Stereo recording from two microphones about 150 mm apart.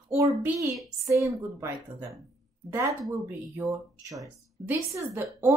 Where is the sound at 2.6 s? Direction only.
20° right (ahead or behind).